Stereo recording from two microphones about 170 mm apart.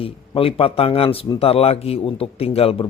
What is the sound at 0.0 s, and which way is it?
Speech, 35° left (ahead or behind).